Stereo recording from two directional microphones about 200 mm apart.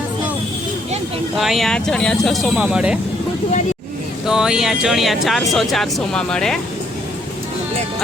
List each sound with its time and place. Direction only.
1.4 s speech: centre (ahead or behind)
4.3 s speech: 5° right (ahead or behind)